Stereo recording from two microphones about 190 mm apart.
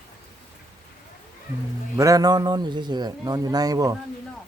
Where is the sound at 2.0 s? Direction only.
20° right (ahead or behind).